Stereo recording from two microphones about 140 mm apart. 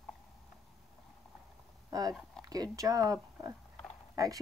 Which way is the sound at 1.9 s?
25° right (ahead or behind).